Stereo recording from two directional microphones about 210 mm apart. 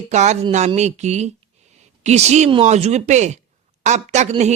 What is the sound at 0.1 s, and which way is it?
Speech, 35° right (ahead or behind).